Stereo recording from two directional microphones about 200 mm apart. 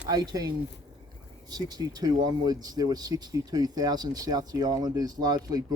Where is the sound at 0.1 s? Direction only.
20° right (ahead or behind).